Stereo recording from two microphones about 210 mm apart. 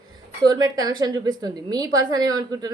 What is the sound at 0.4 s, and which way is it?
A woman's voice, 20° right (ahead or behind).